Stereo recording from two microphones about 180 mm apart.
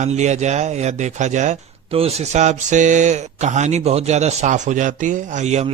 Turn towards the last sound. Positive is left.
turn(degrees=-40)  # may be behind; listen again after turning